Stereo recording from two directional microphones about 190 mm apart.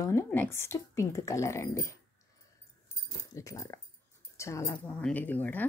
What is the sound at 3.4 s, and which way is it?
Speech, 15° left (ahead or behind).